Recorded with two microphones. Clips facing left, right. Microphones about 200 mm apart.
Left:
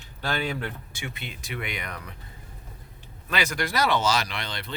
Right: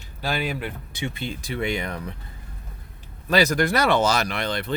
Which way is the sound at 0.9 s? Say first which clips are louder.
Right 8 dB; 30° right (ahead or behind).